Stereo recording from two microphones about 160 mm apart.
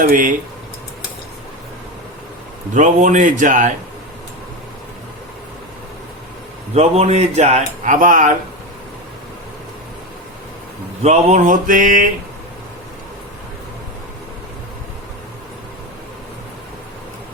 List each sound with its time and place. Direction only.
0.0 s mantra: 55° right (ahead or behind)
2.7 s speech: 50° right (ahead or behind)
6.7 s speech: 45° right (ahead or behind)
11.0 s mantra: 45° right (ahead or behind)